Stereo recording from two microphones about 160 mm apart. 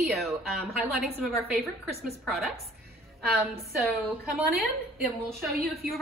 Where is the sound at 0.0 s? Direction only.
Centre (ahead or behind).